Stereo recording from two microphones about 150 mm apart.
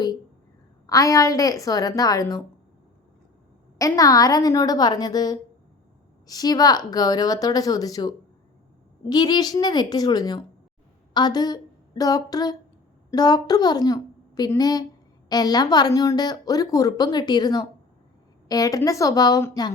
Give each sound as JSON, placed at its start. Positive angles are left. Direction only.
{"t": 0.9, "sound": "a woman's voice", "side_deg": 25}
{"t": 3.8, "sound": "a woman's voice", "side_deg": 25}